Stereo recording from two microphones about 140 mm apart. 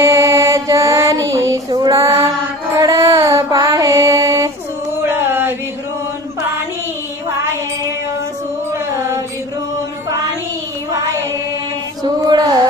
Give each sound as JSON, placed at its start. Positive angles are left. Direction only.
{"t": 0.0, "sound": "female singing", "side_deg": -20}
{"t": 5.0, "sound": "a sound", "side_deg": -15}
{"t": 12.0, "sound": "music", "side_deg": -30}